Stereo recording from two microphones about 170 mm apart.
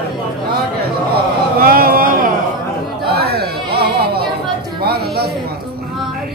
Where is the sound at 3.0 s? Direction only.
70° right (ahead or behind).